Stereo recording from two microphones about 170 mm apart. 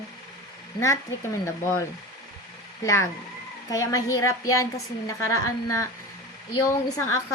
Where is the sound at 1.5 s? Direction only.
15° left (ahead or behind).